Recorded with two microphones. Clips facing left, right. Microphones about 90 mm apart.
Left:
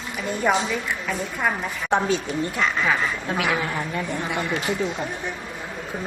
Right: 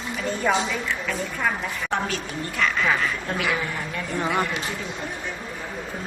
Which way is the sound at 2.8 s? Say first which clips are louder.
Even; 5° left (ahead or behind).